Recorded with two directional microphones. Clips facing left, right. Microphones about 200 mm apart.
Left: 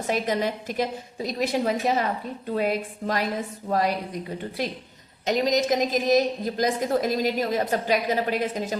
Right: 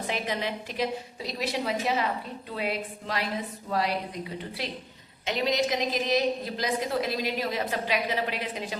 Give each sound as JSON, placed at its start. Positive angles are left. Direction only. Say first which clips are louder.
{"t": 0.1, "sound": "a woman's voice", "louder": "left 7 dB", "side_deg": 45}